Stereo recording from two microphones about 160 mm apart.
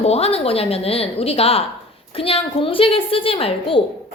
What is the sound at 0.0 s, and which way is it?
A woman's voice, 40° left (ahead or behind).